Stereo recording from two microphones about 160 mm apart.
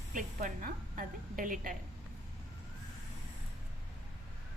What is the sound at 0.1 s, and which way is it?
A woman's voice, 55° right (ahead or behind).